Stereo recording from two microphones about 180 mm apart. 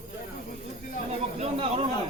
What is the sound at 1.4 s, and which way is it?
Snake, 35° right (ahead or behind).